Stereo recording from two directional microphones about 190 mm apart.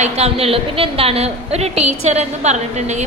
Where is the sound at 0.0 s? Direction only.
30° right (ahead or behind).